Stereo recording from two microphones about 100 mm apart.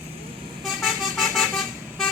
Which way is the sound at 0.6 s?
Centre (ahead or behind).